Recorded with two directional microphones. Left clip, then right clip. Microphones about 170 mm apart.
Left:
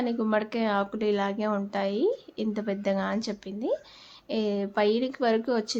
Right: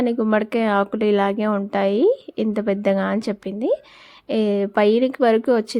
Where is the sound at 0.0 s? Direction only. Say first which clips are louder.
Right 7 dB; 45° right (ahead or behind).